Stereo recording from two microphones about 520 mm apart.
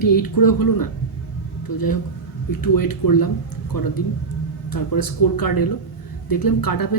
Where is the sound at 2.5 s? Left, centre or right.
Left.